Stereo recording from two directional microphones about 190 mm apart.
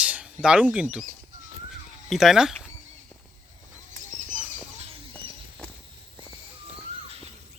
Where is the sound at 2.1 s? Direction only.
Centre (ahead or behind).